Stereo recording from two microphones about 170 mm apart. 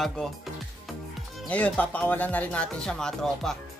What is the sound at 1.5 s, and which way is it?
Speech, 10° left (ahead or behind).